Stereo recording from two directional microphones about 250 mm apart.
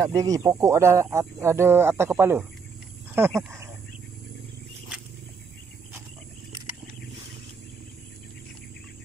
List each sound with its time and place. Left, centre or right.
0.0 s speech: centre